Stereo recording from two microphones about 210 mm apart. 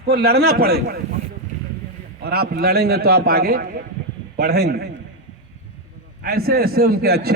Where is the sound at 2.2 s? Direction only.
50° right (ahead or behind).